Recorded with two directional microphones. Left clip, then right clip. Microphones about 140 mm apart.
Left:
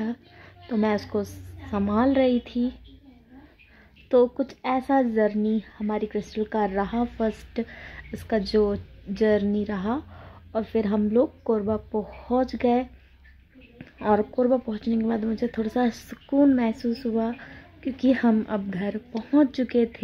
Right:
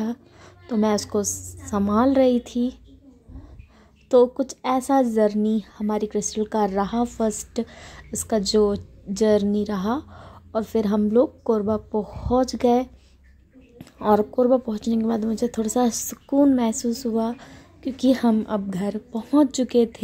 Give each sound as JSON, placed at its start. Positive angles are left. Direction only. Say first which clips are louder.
{"t": 0.0, "sound": "a woman's voice", "louder": "right 2 dB", "side_deg": -35}
{"t": 4.1, "sound": "a woman's voice", "louder": "right 3 dB", "side_deg": -35}